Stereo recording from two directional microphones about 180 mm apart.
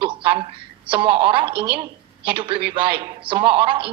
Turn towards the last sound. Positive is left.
turn(degrees=-30)  # may be behind; listen again after turning